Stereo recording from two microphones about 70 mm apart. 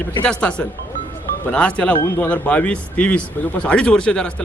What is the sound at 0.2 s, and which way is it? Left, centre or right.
A man's voice, centre.